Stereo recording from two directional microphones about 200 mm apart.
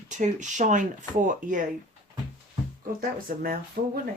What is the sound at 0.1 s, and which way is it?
Speech, 40° right (ahead or behind).